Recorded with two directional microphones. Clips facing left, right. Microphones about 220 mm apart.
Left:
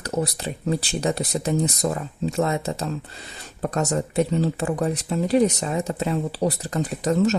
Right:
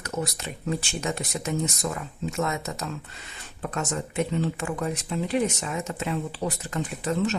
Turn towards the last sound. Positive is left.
turn(degrees=40)  # may be behind; listen again after turning